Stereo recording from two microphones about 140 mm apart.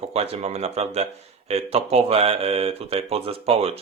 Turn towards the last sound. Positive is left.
turn(degrees=-45)  # may be behind; listen again after turning